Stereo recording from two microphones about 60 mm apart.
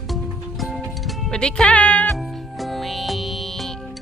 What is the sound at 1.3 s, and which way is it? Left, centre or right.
Music, centre.